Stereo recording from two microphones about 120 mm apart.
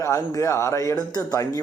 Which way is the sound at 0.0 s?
25° left (ahead or behind).